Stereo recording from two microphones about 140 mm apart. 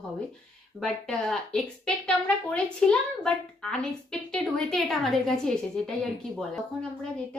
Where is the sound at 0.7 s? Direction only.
5° left (ahead or behind).